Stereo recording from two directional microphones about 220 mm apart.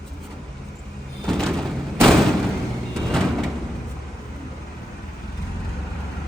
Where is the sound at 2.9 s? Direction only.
Centre (ahead or behind).